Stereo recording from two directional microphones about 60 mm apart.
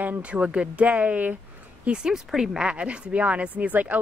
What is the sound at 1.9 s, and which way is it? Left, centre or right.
Speech, centre.